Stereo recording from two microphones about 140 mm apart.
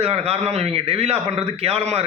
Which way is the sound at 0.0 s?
45° right (ahead or behind).